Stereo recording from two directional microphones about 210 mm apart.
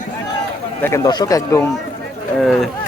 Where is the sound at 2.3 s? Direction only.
Centre (ahead or behind).